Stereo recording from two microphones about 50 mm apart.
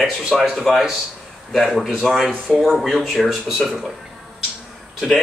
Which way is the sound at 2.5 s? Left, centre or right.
Centre.